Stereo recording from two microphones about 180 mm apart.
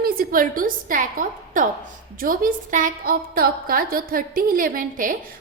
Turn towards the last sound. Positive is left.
turn(degrees=-50)  # may be behind; listen again after turning